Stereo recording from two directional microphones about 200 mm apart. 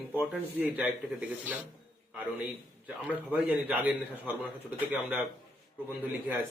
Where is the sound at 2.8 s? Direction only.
10° right (ahead or behind).